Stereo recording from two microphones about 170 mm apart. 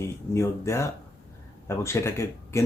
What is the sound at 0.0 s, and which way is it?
Speech, 15° left (ahead or behind).